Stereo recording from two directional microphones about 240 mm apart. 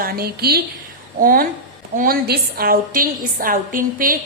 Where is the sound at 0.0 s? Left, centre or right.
Right.